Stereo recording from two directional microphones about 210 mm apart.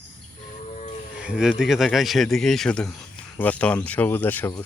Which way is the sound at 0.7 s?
35° left (ahead or behind).